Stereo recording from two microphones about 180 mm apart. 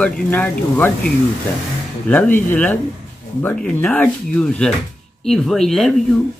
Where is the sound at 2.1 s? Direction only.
10° left (ahead or behind).